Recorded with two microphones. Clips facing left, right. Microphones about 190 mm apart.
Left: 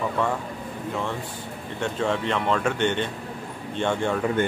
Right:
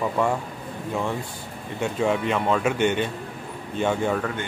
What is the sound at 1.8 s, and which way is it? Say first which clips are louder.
Speech: right 2 dB; 10° right (ahead or behind).